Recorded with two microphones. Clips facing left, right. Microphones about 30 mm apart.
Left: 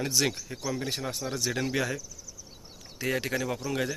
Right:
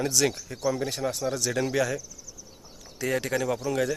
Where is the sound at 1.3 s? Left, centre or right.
Centre.